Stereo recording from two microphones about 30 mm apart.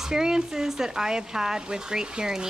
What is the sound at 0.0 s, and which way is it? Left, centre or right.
Speech, right.